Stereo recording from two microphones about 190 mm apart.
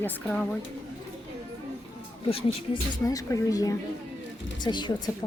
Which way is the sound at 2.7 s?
20° left (ahead or behind).